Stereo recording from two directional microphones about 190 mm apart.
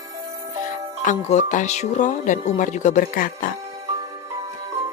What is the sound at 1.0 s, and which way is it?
Speech, 40° left (ahead or behind).